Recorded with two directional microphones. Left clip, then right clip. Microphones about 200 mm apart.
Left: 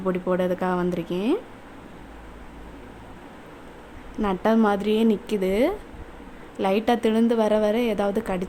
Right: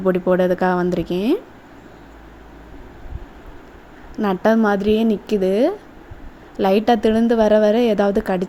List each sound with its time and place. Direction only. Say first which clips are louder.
0.0 s a woman's voice: right 7 dB; 20° right (ahead or behind)
4.2 s a woman's voice: right 5 dB; 20° right (ahead or behind)